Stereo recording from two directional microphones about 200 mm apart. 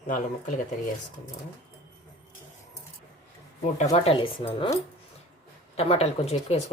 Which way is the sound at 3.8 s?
30° left (ahead or behind).